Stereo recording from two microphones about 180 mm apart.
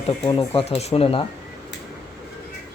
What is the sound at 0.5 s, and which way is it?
Speech, 35° left (ahead or behind).